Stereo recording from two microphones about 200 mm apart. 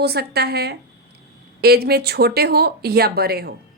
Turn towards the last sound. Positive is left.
turn(degrees=-50)  # may be behind; listen again after turning